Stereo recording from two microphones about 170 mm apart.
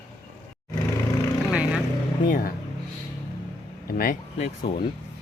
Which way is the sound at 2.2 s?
60° left (ahead or behind).